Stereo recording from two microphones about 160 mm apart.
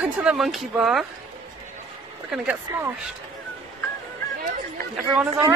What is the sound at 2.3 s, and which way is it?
Speech, 10° right (ahead or behind).